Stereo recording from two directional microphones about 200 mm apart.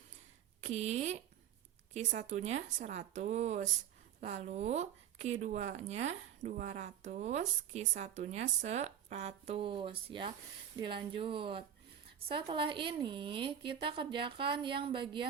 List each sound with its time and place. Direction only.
0.6 s a woman's voice: 35° right (ahead or behind)